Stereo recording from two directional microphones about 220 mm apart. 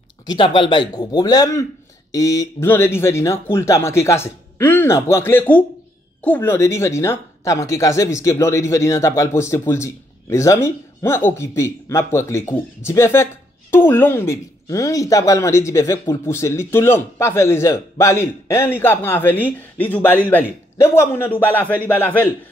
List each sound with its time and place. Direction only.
0.3 s speech: 20° left (ahead or behind)